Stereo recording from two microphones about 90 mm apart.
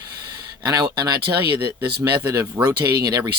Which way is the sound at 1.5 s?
35° right (ahead or behind).